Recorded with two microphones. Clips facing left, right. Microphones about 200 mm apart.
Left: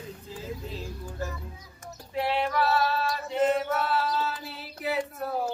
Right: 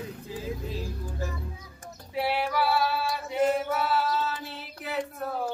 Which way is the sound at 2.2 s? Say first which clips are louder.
Even; 5° right (ahead or behind).